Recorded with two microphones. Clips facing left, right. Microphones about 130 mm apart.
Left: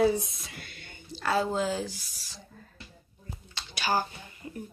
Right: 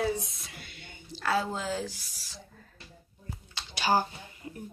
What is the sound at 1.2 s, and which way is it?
Speech, centre (ahead or behind).